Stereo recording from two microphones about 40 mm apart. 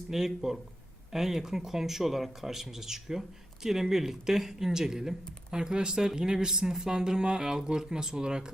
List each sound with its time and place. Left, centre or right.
0.1 s speech: centre